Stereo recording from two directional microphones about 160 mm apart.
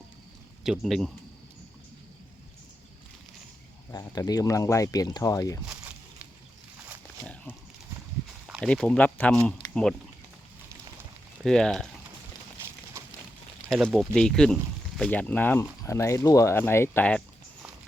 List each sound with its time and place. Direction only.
0.6 s speech: centre (ahead or behind)
3.9 s speech: 20° left (ahead or behind)
5.6 s a sound: 10° right (ahead or behind)
8.6 s speech: 5° left (ahead or behind)
9.6 s typing: 25° left (ahead or behind)
11.4 s speech: 5° left (ahead or behind)
12.9 s a sound: 20° right (ahead or behind)
13.7 s speech: centre (ahead or behind)